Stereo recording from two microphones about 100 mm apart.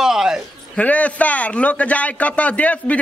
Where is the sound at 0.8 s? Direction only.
15° left (ahead or behind).